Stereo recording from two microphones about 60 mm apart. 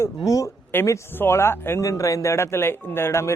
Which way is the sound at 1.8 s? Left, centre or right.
Left.